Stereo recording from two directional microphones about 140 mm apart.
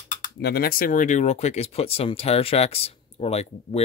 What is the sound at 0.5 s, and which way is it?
Speech, 90° left.